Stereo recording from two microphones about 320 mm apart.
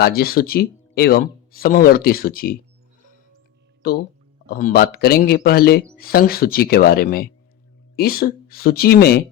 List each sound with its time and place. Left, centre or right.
0.2 s speech: left
3.8 s speech: left